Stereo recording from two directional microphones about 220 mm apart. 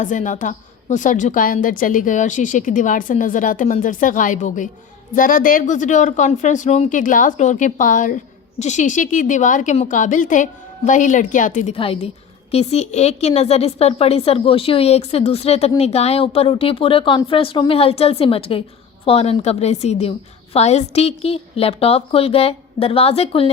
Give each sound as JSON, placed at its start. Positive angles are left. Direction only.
{"t": 0.0, "sound": "a woman's voice", "side_deg": 35}